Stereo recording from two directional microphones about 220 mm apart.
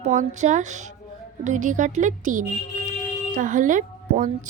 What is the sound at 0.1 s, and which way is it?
A woman's voice, 35° right (ahead or behind).